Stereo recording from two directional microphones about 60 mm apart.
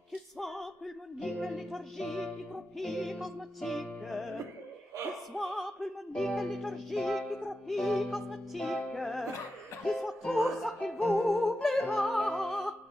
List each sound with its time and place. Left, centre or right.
0.1 s music: centre
11.0 s music: centre
11.2 s music: centre